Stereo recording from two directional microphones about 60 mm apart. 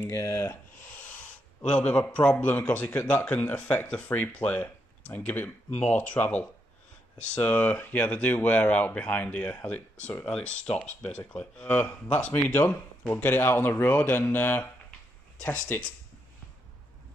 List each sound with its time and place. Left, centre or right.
0.0 s speech: left
0.8 s rub: left
1.6 s speech: left
13.1 s speech: left
15.7 s speech: left